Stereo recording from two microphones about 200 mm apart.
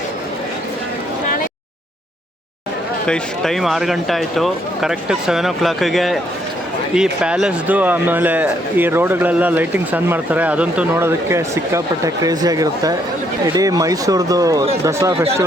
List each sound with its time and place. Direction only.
3.1 s a man's voice: centre (ahead or behind); by 14.6 s 20° right (ahead or behind)